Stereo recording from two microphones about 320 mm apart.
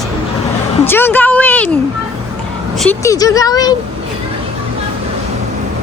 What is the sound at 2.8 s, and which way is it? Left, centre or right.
Speech, centre.